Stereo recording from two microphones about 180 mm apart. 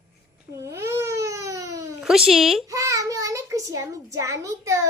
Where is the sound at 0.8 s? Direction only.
15° right (ahead or behind).